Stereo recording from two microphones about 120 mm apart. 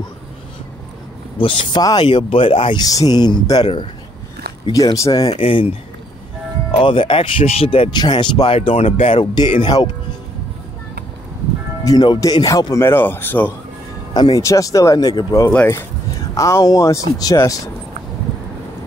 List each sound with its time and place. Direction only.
1.4 s speech: 45° left (ahead or behind)
2.8 s speech: 30° left (ahead or behind)
4.9 s speech: 30° left (ahead or behind)
5.3 s speech: 50° left (ahead or behind)
6.7 s speech: 45° left (ahead or behind)
7.9 s speech: 40° left (ahead or behind)
8.5 s speech: 60° left (ahead or behind)
9.2 s speech: 40° left (ahead or behind)
11.8 s speech: 35° left (ahead or behind)
12.8 s speech: 20° left (ahead or behind)
14.1 s speech: 35° left (ahead or behind)
15.5 s speech: 20° left (ahead or behind)